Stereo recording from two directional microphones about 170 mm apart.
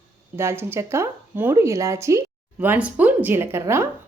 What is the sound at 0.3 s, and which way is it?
A woman's voice, 15° right (ahead or behind).